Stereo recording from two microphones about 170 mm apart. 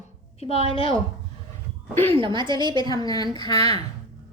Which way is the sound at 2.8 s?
20° left (ahead or behind).